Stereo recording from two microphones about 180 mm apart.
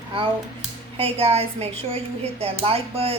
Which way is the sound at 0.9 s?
30° right (ahead or behind).